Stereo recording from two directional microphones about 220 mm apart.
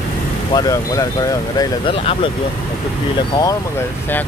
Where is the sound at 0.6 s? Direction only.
15° left (ahead or behind).